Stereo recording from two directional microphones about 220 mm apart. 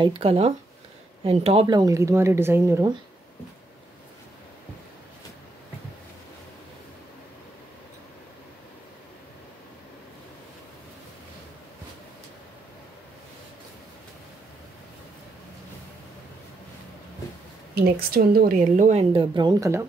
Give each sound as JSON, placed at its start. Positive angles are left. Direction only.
{"t": 0.0, "sound": "speech", "side_deg": -25}
{"t": 17.7, "sound": "a woman's voice", "side_deg": -45}